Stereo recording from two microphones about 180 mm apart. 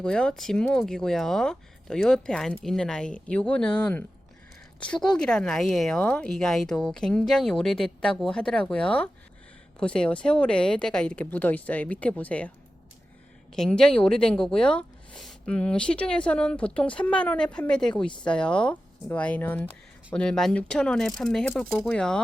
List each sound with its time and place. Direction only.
0.0 s speech: 5° left (ahead or behind)
13.5 s speech: 5° left (ahead or behind)